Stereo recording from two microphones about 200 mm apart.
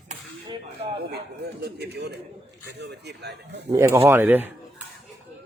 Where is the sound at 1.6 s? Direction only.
55° right (ahead or behind).